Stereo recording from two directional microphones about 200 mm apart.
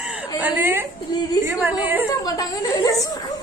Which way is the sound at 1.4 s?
10° right (ahead or behind).